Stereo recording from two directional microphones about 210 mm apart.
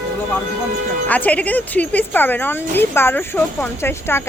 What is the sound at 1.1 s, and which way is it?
A woman's voice, 5° left (ahead or behind).